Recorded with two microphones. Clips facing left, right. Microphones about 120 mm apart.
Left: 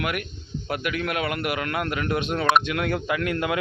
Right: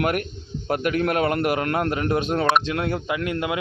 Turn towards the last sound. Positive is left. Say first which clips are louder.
# even
turn(degrees=-20)  # may be behind; listen again after turning